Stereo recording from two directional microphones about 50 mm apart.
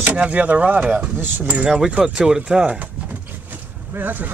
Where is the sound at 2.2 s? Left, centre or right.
Centre.